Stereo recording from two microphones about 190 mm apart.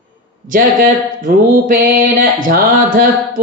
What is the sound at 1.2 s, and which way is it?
Music, 50° right (ahead or behind).